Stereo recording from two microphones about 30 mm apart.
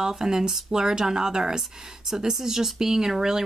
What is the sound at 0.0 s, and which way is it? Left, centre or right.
Speech, right.